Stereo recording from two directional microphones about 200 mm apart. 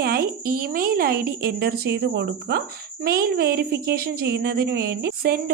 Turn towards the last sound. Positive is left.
turn(degrees=-50)  # may be behind; listen again after turning